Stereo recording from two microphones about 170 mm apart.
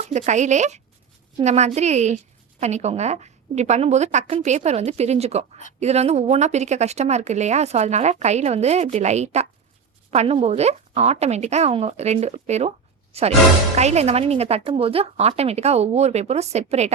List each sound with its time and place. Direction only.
0.1 s a woman's voice: 45° right (ahead or behind)